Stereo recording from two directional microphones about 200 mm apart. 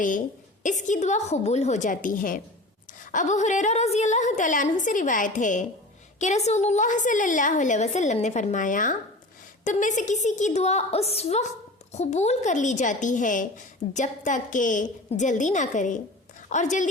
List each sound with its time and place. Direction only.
0.6 s speech: 40° left (ahead or behind)